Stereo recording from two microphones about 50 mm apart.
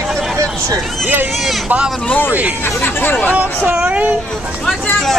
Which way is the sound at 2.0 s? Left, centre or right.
Left.